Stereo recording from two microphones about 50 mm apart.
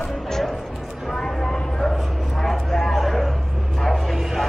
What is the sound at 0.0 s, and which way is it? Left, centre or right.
Music, centre.